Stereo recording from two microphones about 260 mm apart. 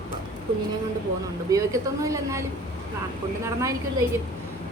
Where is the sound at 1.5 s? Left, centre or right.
Centre.